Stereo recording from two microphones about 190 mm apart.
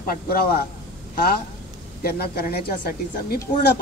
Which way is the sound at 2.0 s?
55° left (ahead or behind).